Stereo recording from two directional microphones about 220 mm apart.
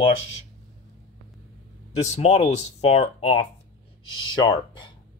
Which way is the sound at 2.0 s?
30° left (ahead or behind).